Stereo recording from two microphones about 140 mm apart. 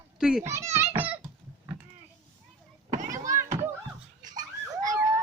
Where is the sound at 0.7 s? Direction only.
15° right (ahead or behind).